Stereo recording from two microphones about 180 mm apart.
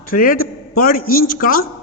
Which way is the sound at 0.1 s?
50° left (ahead or behind).